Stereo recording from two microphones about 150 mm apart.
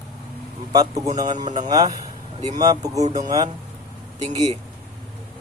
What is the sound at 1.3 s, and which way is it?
Speech, 50° right (ahead or behind).